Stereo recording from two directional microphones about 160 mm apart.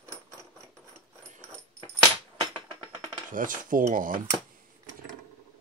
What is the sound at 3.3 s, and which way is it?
Speech, 55° right (ahead or behind).